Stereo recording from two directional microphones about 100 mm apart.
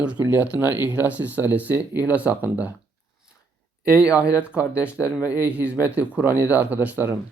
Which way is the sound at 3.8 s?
10° right (ahead or behind).